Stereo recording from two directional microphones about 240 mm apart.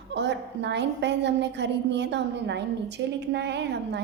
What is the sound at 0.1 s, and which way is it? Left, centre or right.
A woman's voice, right.